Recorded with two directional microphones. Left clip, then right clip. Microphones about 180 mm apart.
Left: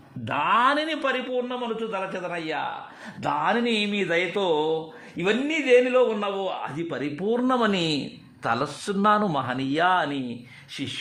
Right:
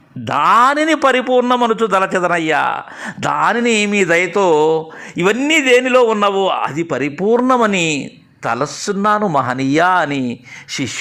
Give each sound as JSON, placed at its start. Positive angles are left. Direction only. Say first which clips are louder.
{"t": 0.3, "sound": "speech", "louder": "right 10 dB", "side_deg": -30}
{"t": 1.0, "sound": "a man's voice", "louder": "right 13 dB", "side_deg": -50}